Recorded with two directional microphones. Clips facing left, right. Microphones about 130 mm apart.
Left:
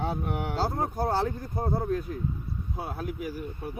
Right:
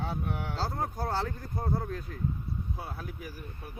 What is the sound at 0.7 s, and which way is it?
Speech, 30° left (ahead or behind).